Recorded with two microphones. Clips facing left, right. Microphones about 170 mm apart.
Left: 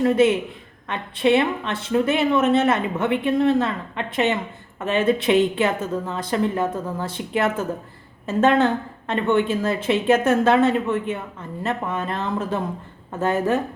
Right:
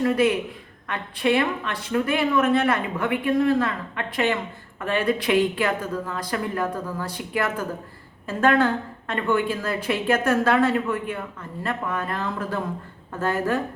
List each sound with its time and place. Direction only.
0.0 s a woman's voice: 25° left (ahead or behind)